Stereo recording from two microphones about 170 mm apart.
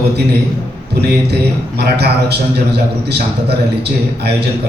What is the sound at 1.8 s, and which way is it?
A man's voice, 70° right (ahead or behind).